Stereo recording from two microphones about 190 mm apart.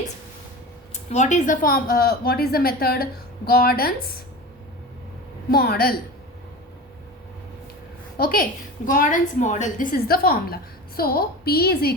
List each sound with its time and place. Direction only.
0.9 s a woman's voice: 40° left (ahead or behind)
5.5 s a woman's voice: 55° left (ahead or behind)
8.2 s a woman's voice: 50° left (ahead or behind)